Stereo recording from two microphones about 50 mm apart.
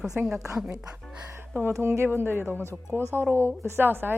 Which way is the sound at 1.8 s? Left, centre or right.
Right.